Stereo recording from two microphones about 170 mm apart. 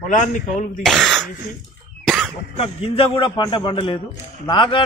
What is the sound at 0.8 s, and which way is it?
Speech, centre (ahead or behind).